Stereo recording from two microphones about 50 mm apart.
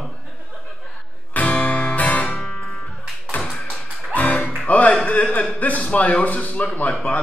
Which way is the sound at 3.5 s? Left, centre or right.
Centre.